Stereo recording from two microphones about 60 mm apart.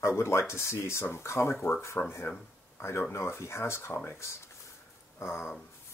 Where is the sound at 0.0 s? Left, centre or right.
Left.